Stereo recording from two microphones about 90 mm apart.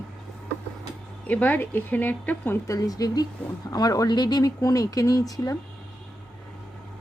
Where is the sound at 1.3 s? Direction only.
20° left (ahead or behind).